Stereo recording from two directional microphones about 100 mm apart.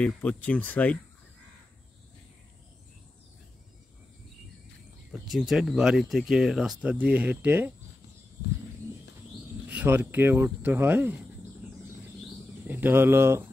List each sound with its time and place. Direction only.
0.0 s speech: 15° left (ahead or behind)
5.1 s speech: 5° right (ahead or behind); by 7.7 s 20° right (ahead or behind)
9.7 s speech: 20° right (ahead or behind)
12.6 s speech: 20° right (ahead or behind)